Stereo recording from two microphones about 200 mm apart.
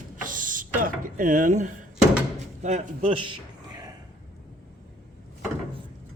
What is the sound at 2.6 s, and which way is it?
Speech, 35° right (ahead or behind).